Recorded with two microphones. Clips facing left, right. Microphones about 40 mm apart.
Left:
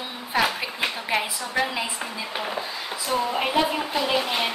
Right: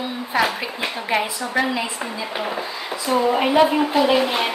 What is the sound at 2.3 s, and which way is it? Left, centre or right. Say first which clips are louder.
A woman's voice: right 2 dB; centre.